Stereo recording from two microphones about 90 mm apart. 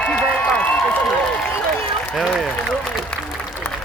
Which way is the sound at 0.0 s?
10° left (ahead or behind).